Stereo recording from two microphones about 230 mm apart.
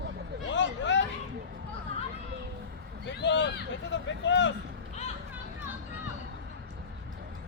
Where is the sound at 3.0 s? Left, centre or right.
Left.